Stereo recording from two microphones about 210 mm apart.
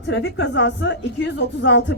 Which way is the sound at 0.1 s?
55° left (ahead or behind).